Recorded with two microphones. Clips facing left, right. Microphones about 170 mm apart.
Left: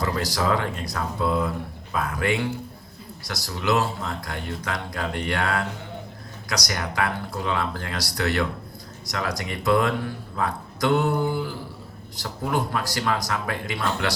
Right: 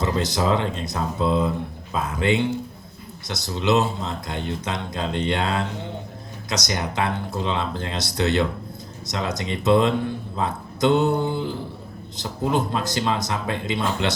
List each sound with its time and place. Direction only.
0.0 s speech: 20° right (ahead or behind)